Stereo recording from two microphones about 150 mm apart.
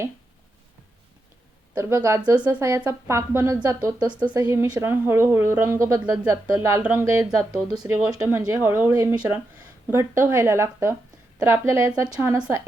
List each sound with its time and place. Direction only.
1.7 s a woman's voice: 20° right (ahead or behind)
7.3 s a woman's voice: 5° right (ahead or behind)